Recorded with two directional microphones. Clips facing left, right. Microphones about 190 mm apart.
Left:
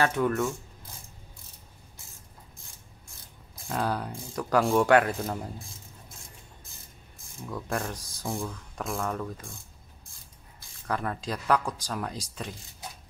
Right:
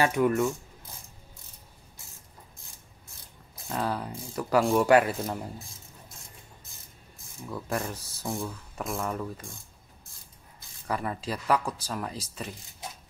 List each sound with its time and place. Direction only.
0.0 s speech: 10° right (ahead or behind)
3.6 s speech: centre (ahead or behind)
7.4 s speech: 5° right (ahead or behind)
10.9 s speech: 5° right (ahead or behind)